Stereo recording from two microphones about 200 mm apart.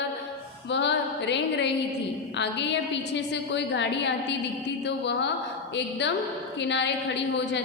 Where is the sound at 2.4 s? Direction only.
60° left (ahead or behind).